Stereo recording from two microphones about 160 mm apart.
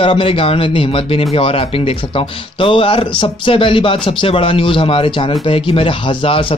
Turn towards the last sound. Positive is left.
turn(degrees=35)  # may be behind; listen again after turning